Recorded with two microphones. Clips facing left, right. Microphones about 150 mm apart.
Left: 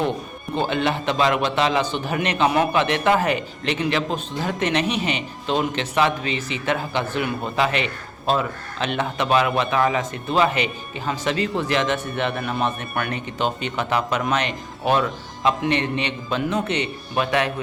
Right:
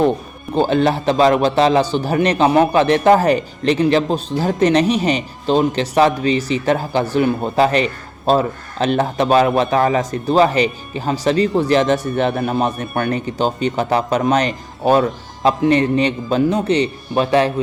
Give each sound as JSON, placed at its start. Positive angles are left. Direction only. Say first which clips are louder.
{"t": 0.5, "sound": "a man's voice", "louder": "right 7 dB", "side_deg": -35}